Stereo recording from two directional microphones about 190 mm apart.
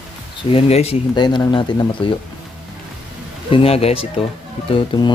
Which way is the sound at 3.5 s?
30° left (ahead or behind).